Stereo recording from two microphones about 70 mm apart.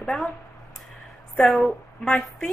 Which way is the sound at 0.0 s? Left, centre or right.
Centre.